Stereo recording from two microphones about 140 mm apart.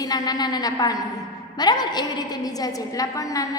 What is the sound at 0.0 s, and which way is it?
A woman's voice, 25° left (ahead or behind).